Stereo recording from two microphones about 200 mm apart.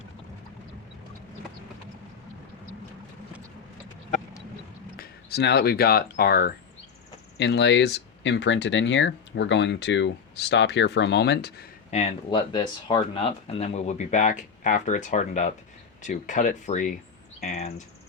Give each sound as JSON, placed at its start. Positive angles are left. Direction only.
{"t": 4.9, "sound": "speech", "side_deg": 55}
{"t": 11.9, "sound": "speech", "side_deg": 30}